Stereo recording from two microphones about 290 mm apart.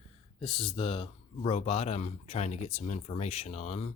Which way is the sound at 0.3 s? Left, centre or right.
Centre.